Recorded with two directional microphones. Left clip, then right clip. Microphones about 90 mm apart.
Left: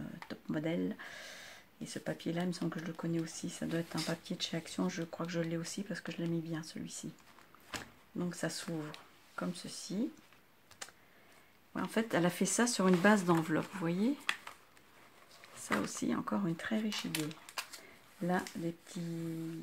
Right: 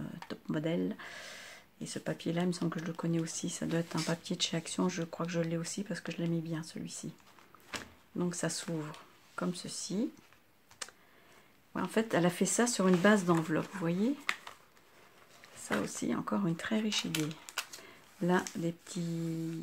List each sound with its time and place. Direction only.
0.3 s a sound: 30° right (ahead or behind)
0.7 s speech: 25° right (ahead or behind)
2.7 s speech: 40° right (ahead or behind)
10.8 s computer keyboard: 35° right (ahead or behind)
11.7 s speech: 25° right (ahead or behind); by 14.5 s 10° right (ahead or behind)
15.6 s speech: 10° right (ahead or behind)
16.3 s speech: 20° right (ahead or behind)
16.5 s speech: 35° right (ahead or behind)